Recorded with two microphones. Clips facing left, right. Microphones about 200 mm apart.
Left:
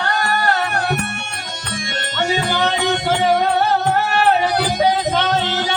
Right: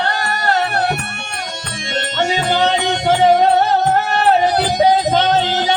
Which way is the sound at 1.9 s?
25° right (ahead or behind).